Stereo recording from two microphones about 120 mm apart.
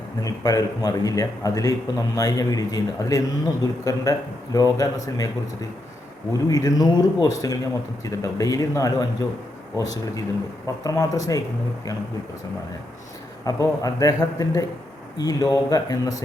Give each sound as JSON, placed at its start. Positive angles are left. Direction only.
{"t": 0.2, "sound": "speech", "side_deg": 30}
{"t": 6.3, "sound": "speech", "side_deg": 30}
{"t": 13.4, "sound": "speech", "side_deg": 30}